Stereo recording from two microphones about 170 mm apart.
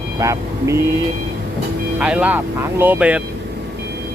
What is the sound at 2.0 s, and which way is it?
Speech, 5° right (ahead or behind).